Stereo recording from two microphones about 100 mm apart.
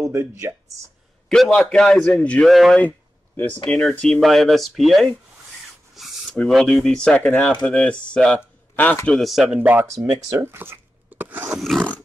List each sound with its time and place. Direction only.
0.0 s speech: 25° right (ahead or behind)
1.3 s a man's voice: centre (ahead or behind)
2.4 s a man's voice: centre (ahead or behind)
3.3 s a man's voice: 15° left (ahead or behind)
9.1 s a man's voice: centre (ahead or behind)
9.6 s speech: 15° right (ahead or behind)
9.8 s speech: 30° right (ahead or behind)
11.7 s a man's voice: centre (ahead or behind)